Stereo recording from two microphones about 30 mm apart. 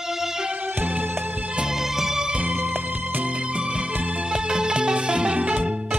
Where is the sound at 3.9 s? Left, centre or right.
Right.